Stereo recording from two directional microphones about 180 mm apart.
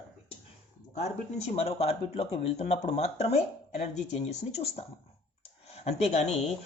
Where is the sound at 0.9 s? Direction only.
35° left (ahead or behind).